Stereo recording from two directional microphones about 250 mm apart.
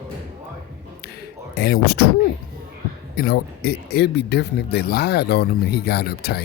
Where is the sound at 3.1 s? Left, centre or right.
Left.